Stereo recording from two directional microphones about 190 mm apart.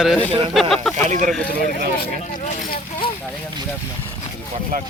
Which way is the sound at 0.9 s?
40° right (ahead or behind).